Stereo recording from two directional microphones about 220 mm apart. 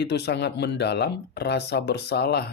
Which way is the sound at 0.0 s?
50° left (ahead or behind).